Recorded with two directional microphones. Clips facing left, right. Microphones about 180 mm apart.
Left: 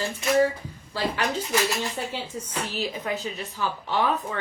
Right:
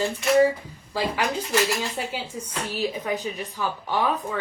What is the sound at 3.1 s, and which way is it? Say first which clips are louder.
Speech: right 2 dB; 15° right (ahead or behind).